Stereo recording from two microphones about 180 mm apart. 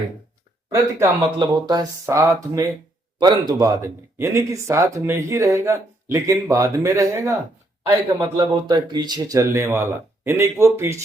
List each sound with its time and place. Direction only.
1.4 s speech: 20° right (ahead or behind)